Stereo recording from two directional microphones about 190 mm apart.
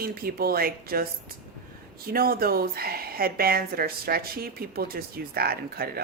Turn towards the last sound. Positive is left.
turn(degrees=-55)  # may be behind; listen again after turning